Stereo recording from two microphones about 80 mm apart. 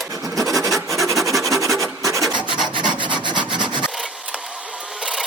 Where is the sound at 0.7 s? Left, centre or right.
Centre.